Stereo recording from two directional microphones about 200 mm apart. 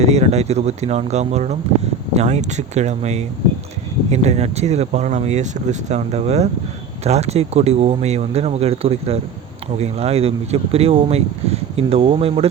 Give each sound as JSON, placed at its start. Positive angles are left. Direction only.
{"t": 0.0, "sound": "speech", "side_deg": -30}